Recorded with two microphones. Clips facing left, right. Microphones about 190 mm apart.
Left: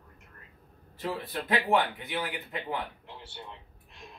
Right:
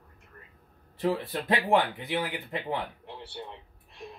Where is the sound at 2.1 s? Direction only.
25° right (ahead or behind).